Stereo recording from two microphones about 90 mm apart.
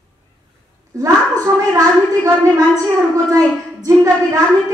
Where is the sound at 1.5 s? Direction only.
50° right (ahead or behind).